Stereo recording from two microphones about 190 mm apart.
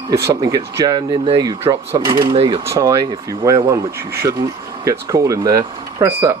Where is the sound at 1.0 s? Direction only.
30° right (ahead or behind).